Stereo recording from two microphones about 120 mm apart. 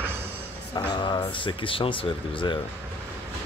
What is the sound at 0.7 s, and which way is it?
Speech, 35° left (ahead or behind).